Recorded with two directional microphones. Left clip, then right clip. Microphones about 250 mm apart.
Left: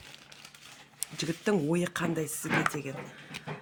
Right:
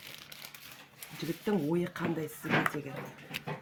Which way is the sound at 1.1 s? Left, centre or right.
Left.